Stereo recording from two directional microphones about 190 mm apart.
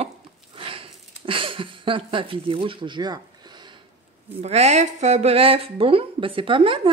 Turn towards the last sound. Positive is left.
turn(degrees=-25)  # may be behind; listen again after turning